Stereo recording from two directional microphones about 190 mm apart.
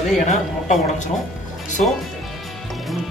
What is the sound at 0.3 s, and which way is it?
Speech, 40° left (ahead or behind).